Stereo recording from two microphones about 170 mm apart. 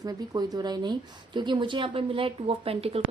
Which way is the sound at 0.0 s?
25° right (ahead or behind).